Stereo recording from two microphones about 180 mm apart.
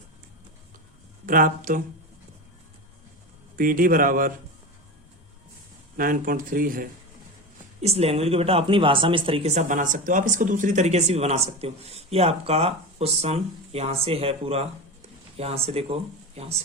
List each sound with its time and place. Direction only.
1.3 s speech: 50° right (ahead or behind)
3.5 s speech: 50° right (ahead or behind)
6.0 s speech: 50° right (ahead or behind)
7.8 s speech: 35° right (ahead or behind)